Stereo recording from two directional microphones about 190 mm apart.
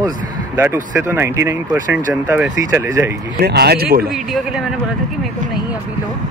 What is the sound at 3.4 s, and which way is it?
Speech, 60° right (ahead or behind).